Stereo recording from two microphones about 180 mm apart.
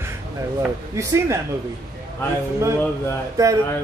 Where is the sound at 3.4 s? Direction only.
20° right (ahead or behind).